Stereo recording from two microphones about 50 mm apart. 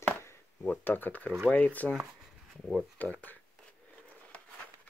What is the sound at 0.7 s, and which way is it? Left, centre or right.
Speech, left.